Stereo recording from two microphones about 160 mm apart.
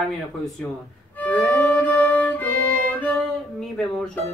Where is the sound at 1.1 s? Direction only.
5° left (ahead or behind).